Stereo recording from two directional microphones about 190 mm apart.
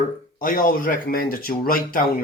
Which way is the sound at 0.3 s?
45° left (ahead or behind).